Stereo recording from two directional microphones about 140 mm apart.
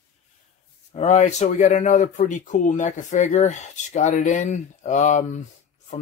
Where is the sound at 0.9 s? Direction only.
55° left (ahead or behind).